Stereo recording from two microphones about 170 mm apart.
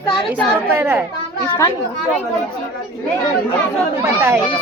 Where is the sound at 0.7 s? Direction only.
15° right (ahead or behind).